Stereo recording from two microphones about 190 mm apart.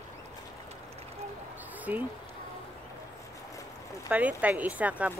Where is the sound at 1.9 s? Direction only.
10° right (ahead or behind).